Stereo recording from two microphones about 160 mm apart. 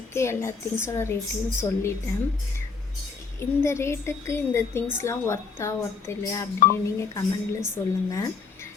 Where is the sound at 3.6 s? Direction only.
15° left (ahead or behind).